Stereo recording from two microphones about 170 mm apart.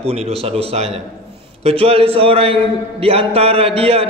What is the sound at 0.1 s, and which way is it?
A man's voice, 35° right (ahead or behind).